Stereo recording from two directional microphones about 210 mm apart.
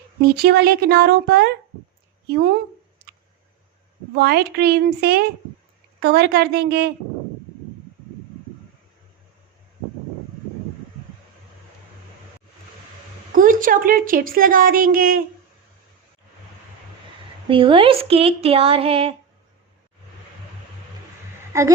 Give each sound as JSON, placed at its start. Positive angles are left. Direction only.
{"t": 0.2, "sound": "a woman's voice", "side_deg": -45}
{"t": 4.1, "sound": "a woman's voice", "side_deg": -50}
{"t": 13.3, "sound": "a woman's voice", "side_deg": -40}
{"t": 17.5, "sound": "speech", "side_deg": -25}
{"t": 21.5, "sound": "a woman's voice", "side_deg": -15}